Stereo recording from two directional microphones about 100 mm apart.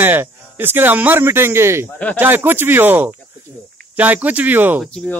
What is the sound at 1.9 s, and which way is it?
Speech, 15° left (ahead or behind).